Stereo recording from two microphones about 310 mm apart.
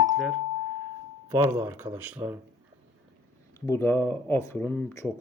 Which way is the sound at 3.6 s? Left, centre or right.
Centre.